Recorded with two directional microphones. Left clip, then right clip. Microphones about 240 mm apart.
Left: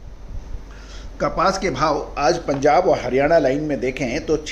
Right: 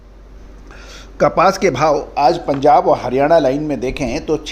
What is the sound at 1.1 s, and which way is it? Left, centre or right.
A man's voice, right.